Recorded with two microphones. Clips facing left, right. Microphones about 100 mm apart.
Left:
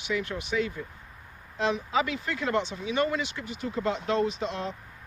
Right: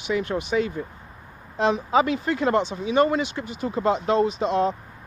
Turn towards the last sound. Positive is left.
turn(degrees=-25)  # may be behind; listen again after turning